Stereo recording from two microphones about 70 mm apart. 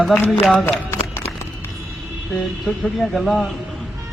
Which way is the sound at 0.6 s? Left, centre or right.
Left.